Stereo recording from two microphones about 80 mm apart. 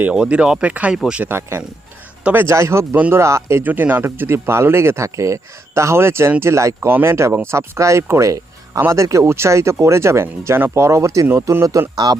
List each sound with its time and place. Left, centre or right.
0.0 s speech: centre
1.2 s a man's voice: right
2.5 s speech: right
3.6 s speech: right
6.7 s speech: right